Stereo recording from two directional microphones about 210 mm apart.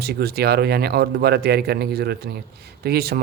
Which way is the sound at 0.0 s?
50° right (ahead or behind).